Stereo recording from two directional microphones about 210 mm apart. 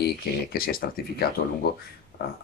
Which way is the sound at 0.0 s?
45° left (ahead or behind).